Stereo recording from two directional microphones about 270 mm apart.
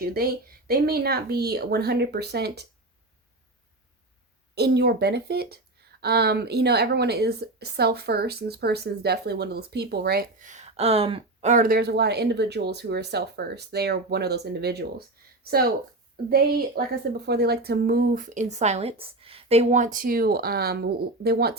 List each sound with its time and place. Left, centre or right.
0.0 s speech: right
4.5 s speech: right